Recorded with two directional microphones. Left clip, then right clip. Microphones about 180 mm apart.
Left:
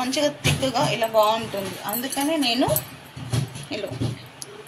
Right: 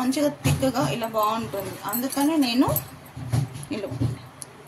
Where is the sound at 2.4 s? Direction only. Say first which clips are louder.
Left 3 dB; 55° right (ahead or behind).